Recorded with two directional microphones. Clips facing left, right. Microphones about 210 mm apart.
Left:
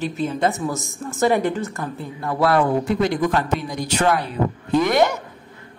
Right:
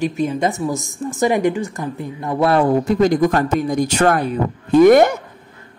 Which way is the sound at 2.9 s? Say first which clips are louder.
Right 5 dB; 40° right (ahead or behind).